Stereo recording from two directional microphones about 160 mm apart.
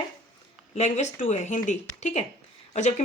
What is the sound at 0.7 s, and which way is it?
Speech, 45° left (ahead or behind).